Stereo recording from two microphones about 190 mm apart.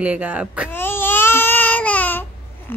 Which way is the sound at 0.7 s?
10° left (ahead or behind).